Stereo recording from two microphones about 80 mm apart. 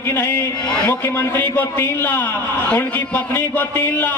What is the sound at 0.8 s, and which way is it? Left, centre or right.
A man's voice, left.